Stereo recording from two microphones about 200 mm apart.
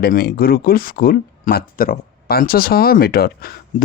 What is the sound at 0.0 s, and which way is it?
Speech, 50° left (ahead or behind).